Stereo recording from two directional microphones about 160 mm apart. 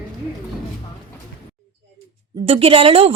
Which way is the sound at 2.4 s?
35° right (ahead or behind).